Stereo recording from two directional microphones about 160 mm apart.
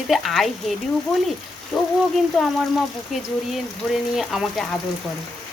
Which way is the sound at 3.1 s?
Centre (ahead or behind).